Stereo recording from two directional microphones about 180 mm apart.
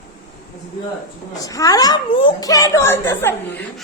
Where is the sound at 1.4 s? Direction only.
20° left (ahead or behind).